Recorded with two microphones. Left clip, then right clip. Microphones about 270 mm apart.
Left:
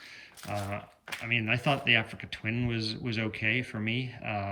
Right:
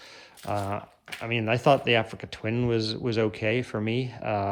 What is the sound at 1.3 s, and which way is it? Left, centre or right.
Speech, centre.